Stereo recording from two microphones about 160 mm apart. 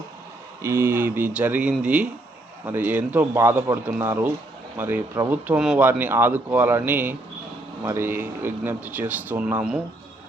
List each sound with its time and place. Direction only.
0.6 s speech: 15° right (ahead or behind)